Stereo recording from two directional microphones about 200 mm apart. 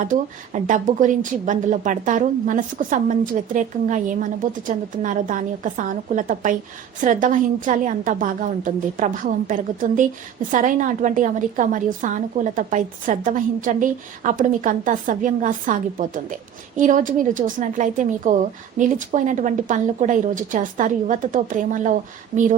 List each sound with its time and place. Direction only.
0.0 s a woman's voice: 40° right (ahead or behind)